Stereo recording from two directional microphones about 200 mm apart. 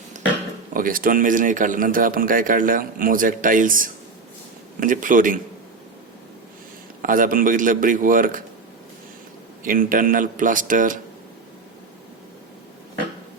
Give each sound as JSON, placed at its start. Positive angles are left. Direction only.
{"t": 0.1, "sound": "a sound", "side_deg": -35}
{"t": 0.7, "sound": "a man's voice", "side_deg": -45}
{"t": 7.0, "sound": "a man's voice", "side_deg": -45}
{"t": 9.6, "sound": "a man's voice", "side_deg": -45}